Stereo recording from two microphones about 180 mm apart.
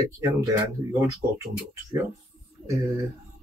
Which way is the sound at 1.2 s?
50° right (ahead or behind).